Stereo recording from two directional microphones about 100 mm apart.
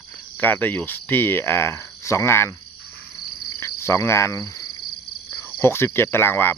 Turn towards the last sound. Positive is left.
turn(degrees=20)  # may be behind; listen again after turning